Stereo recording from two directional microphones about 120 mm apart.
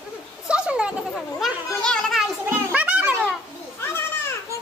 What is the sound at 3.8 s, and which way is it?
Children playing, 20° left (ahead or behind).